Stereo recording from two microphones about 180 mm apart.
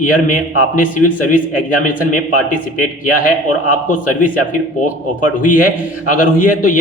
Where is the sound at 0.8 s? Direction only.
50° left (ahead or behind).